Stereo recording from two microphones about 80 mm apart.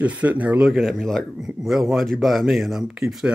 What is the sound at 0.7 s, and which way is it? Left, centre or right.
Speech, centre.